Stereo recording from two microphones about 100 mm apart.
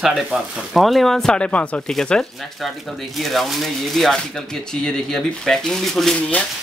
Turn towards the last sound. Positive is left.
turn(degrees=5)  # may be behind; listen again after turning